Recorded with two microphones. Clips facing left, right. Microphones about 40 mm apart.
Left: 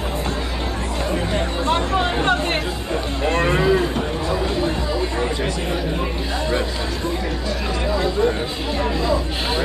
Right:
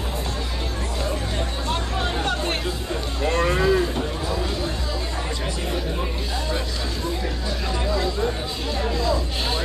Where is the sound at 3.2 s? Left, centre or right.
Left.